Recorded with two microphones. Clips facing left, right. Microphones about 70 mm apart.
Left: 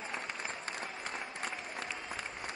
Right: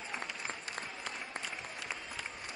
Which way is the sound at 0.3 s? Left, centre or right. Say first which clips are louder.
Left 2 dB; left.